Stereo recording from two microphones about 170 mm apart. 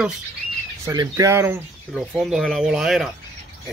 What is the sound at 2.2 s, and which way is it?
Speech, centre (ahead or behind).